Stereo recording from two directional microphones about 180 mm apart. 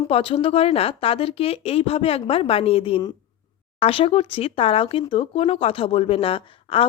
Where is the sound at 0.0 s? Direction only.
30° left (ahead or behind).